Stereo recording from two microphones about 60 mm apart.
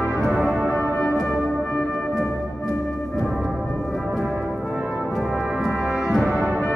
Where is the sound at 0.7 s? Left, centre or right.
Left.